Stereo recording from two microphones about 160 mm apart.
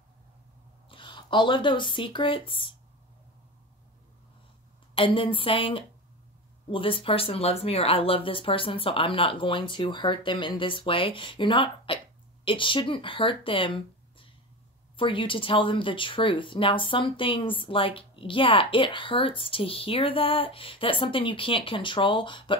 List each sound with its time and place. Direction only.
0.8 s speech: 30° left (ahead or behind)
4.9 s speech: 35° left (ahead or behind)